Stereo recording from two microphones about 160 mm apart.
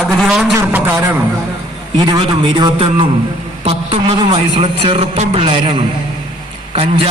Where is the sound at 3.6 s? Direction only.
40° right (ahead or behind).